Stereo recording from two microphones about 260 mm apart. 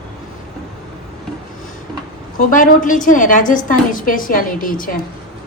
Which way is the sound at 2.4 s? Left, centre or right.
Left.